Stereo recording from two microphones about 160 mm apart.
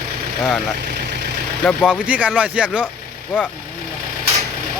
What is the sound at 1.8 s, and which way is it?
Speech, 5° right (ahead or behind).